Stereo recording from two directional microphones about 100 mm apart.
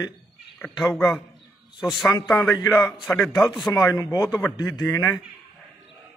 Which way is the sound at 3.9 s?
35° left (ahead or behind).